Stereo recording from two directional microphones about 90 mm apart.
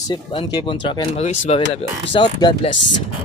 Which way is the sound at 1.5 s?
75° left (ahead or behind).